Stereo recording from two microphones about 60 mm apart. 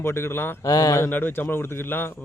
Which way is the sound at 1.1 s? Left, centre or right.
Left.